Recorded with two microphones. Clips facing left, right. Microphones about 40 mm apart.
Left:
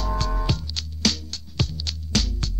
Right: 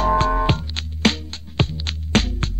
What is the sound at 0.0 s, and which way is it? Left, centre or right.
Music, right.